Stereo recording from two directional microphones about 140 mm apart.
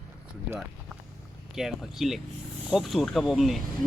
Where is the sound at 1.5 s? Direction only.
Centre (ahead or behind).